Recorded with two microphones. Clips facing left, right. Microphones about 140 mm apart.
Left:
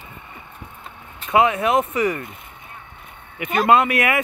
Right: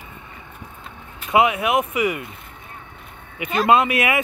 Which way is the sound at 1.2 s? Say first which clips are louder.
Left 1 dB; 15° right (ahead or behind).